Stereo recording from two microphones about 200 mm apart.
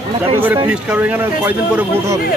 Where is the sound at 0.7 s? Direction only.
5° right (ahead or behind).